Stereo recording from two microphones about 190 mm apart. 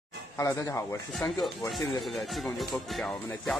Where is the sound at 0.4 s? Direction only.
15° left (ahead or behind).